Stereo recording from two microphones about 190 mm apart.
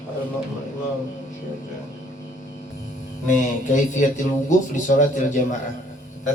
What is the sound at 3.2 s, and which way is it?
A man's voice, 40° left (ahead or behind).